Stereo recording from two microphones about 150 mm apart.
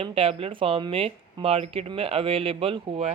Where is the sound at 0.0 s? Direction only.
40° right (ahead or behind).